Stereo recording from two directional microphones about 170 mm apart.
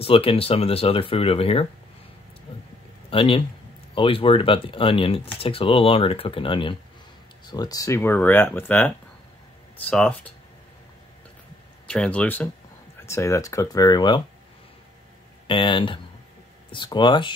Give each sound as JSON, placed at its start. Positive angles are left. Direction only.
{"t": 0.0, "sound": "speech", "side_deg": 35}
{"t": 2.5, "sound": "a sound", "side_deg": 35}
{"t": 3.1, "sound": "a man's voice", "side_deg": 30}
{"t": 11.9, "sound": "speech", "side_deg": 5}
{"t": 15.4, "sound": "speech", "side_deg": 30}